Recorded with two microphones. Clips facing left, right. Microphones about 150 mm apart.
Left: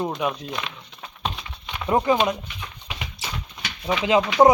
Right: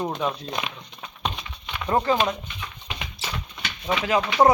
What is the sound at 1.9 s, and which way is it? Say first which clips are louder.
Speech: left 2 dB; 10° left (ahead or behind).